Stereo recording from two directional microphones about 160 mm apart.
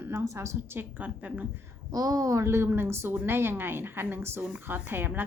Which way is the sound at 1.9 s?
25° right (ahead or behind).